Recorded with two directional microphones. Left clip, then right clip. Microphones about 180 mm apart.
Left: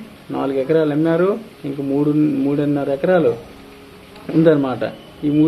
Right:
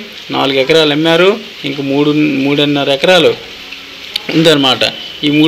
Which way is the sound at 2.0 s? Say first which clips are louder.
Right 6 dB; 20° right (ahead or behind).